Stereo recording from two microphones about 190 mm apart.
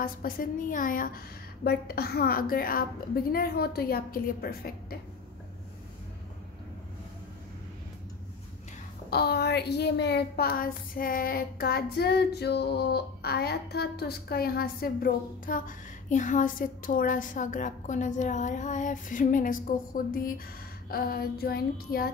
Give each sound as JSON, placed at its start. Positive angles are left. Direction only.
{"t": 0.0, "sound": "speech", "side_deg": 50}
{"t": 9.1, "sound": "speech", "side_deg": 55}